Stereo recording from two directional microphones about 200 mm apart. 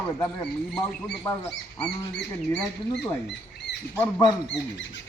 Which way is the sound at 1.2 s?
10° left (ahead or behind).